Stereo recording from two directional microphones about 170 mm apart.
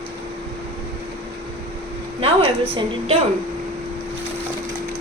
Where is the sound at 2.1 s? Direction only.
35° right (ahead or behind).